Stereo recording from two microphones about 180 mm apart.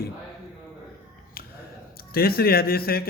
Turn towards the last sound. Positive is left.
turn(degrees=55)  # may be behind; listen again after turning